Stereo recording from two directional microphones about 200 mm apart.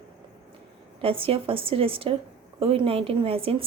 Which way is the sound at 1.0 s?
25° right (ahead or behind).